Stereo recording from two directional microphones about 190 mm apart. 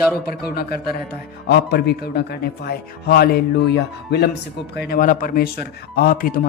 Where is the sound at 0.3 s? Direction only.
55° left (ahead or behind).